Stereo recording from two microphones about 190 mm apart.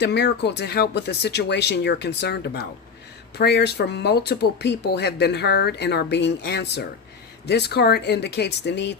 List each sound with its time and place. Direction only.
0.0 s speech: 60° left (ahead or behind)